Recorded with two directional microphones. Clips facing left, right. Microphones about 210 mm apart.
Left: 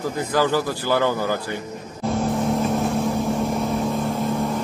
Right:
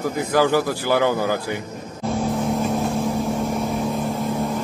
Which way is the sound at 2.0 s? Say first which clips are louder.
Left 1 dB; centre (ahead or behind).